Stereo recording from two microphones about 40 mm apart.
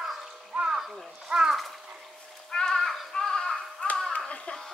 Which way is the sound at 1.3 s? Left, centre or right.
Centre.